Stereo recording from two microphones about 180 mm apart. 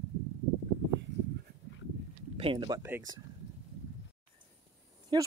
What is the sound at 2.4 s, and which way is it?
Speech, 25° right (ahead or behind).